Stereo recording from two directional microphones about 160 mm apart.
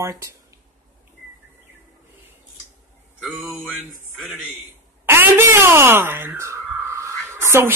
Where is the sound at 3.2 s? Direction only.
10° right (ahead or behind).